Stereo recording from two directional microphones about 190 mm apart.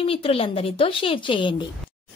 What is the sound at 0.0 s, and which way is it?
A woman's voice, 30° left (ahead or behind).